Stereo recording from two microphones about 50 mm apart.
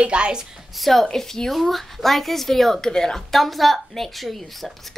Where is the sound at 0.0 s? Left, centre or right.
Right.